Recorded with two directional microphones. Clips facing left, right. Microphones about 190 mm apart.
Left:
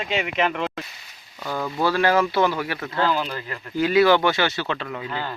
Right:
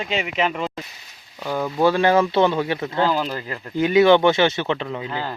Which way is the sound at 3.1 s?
40° right (ahead or behind).